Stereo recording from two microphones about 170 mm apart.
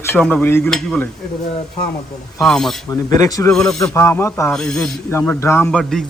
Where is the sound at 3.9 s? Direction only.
15° left (ahead or behind).